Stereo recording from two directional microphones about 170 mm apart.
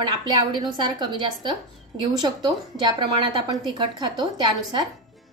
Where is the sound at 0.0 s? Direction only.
25° right (ahead or behind).